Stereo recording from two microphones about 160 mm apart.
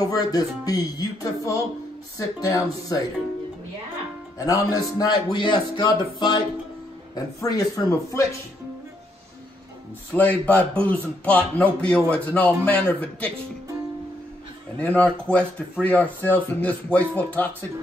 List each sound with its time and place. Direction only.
0.0 s speech: 25° left (ahead or behind)
4.4 s speech: 20° left (ahead or behind)
10.1 s speech: 10° left (ahead or behind)
14.8 s speech: 5° left (ahead or behind)